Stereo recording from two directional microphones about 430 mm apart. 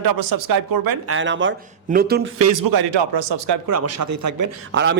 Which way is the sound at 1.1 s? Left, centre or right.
Right.